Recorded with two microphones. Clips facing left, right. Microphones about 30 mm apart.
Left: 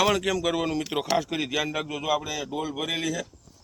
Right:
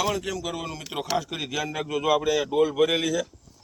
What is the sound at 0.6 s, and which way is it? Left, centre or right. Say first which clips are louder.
Speech: left 7 dB; left.